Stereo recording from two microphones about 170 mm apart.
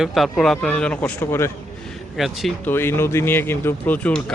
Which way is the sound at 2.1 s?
Centre (ahead or behind).